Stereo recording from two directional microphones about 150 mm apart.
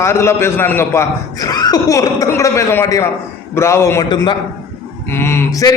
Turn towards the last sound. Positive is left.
turn(degrees=20)  # may be behind; listen again after turning